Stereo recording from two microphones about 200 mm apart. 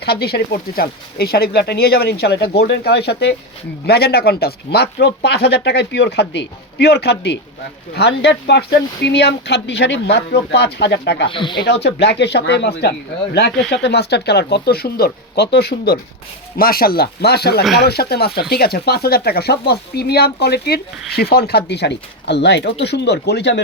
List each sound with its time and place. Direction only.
0.0 s speech: 50° left (ahead or behind)
11.3 s speech: 25° left (ahead or behind)
11.5 s speech: 55° left (ahead or behind)